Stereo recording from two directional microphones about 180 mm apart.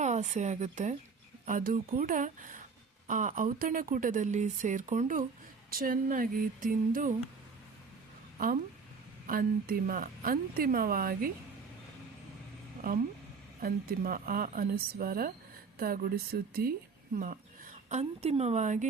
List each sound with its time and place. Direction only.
0.0 s speech: 40° right (ahead or behind)
9.2 s speech: 50° right (ahead or behind)
13.6 s speech: 55° right (ahead or behind)
17.8 s speech: 40° right (ahead or behind)